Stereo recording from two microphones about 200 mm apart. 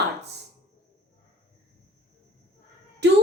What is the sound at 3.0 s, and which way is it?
Speech, 60° right (ahead or behind).